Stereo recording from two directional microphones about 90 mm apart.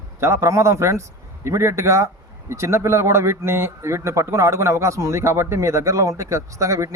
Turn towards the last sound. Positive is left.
turn(degrees=-35)  # may be behind; listen again after turning